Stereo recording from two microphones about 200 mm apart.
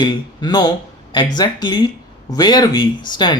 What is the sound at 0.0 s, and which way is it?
Speech, 20° left (ahead or behind).